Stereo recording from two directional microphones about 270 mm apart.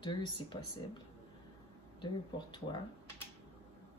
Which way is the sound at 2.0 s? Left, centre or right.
Centre.